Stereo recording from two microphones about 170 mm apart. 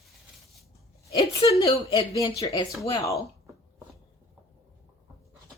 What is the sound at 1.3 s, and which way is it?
Speech, 20° left (ahead or behind).